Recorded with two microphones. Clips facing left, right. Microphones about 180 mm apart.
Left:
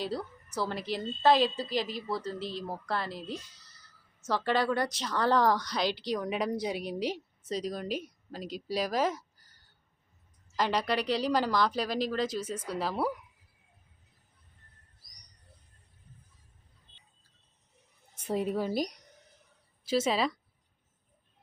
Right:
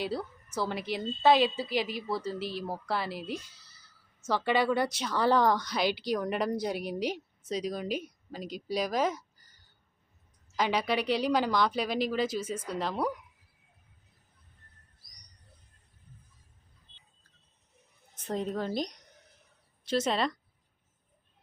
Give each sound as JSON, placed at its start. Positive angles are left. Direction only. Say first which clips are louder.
{"t": 0.0, "sound": "a woman's voice", "louder": "right 1 dB", "side_deg": 0}
{"t": 18.2, "sound": "speech", "louder": "left 2 dB", "side_deg": 10}